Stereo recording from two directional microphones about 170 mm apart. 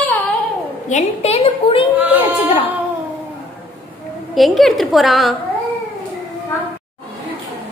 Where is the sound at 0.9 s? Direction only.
40° left (ahead or behind).